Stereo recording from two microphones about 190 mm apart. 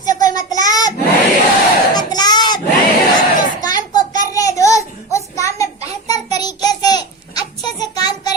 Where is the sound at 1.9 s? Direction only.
20° left (ahead or behind).